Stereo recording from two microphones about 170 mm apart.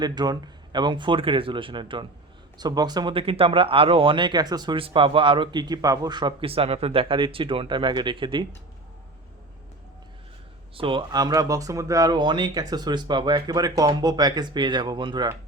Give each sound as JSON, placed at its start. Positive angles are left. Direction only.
{"t": 0.0, "sound": "speech", "side_deg": -25}
{"t": 10.8, "sound": "speech", "side_deg": -30}